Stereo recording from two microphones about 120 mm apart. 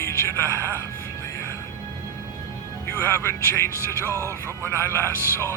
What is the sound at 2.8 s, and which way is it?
Speech, 20° left (ahead or behind).